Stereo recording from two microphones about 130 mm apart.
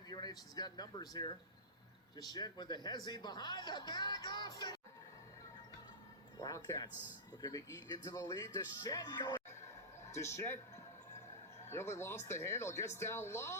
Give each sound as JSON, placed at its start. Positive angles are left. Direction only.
{"t": 0.1, "sound": "speech", "side_deg": 30}
{"t": 6.4, "sound": "speech", "side_deg": 30}
{"t": 10.1, "sound": "a man's voice", "side_deg": 20}
{"t": 11.7, "sound": "speech", "side_deg": 20}